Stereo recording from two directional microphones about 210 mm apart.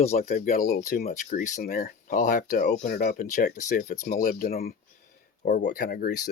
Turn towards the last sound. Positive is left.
turn(degrees=45)  # may be behind; listen again after turning